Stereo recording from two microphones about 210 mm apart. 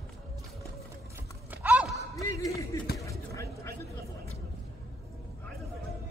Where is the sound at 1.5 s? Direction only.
5° right (ahead or behind).